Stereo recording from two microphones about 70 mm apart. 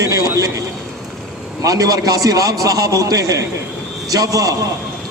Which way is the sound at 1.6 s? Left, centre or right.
Right.